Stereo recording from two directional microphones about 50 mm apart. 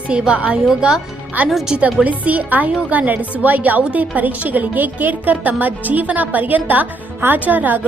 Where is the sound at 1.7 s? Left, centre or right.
Right.